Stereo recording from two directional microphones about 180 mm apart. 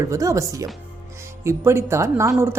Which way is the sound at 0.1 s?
15° right (ahead or behind).